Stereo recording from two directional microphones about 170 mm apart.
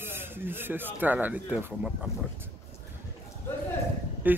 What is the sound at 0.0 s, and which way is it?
Speech, 15° right (ahead or behind).